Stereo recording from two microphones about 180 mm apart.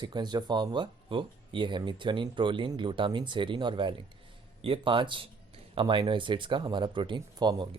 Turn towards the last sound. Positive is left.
turn(degrees=-25)  # may be behind; listen again after turning